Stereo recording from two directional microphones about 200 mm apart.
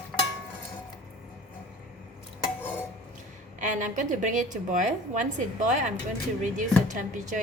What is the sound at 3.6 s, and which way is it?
Speech, 40° right (ahead or behind).